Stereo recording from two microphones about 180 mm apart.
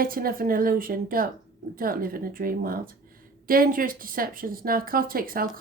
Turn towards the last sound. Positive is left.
turn(degrees=-55)  # may be behind; listen again after turning